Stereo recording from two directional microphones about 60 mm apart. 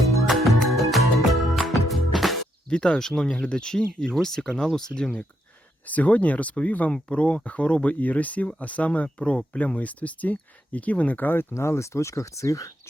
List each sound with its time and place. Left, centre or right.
0.3 s music: centre
2.6 s speech: centre
5.9 s speech: left
11.5 s speech: left